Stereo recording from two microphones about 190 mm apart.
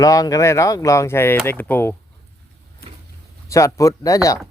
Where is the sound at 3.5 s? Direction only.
15° left (ahead or behind).